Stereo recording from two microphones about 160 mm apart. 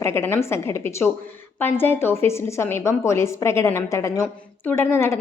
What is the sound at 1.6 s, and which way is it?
A woman's voice, 15° left (ahead or behind).